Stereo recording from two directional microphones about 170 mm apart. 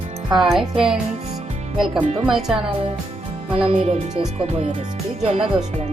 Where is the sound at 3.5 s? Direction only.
35° right (ahead or behind).